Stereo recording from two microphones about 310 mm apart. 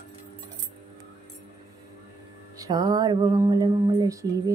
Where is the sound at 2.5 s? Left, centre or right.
Centre.